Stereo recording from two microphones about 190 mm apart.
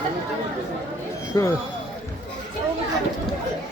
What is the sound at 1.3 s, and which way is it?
Speech, 15° left (ahead or behind).